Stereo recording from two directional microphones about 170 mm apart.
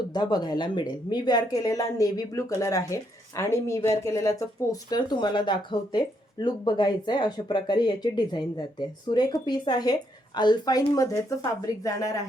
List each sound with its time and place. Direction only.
0.1 s speech: 25° left (ahead or behind)